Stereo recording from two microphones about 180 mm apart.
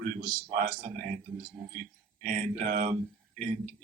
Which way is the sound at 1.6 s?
5° right (ahead or behind).